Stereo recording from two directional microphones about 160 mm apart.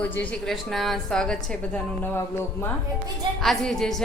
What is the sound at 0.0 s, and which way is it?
A woman's voice, 10° left (ahead or behind).